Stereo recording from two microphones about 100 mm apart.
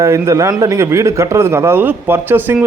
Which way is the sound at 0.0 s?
30° right (ahead or behind).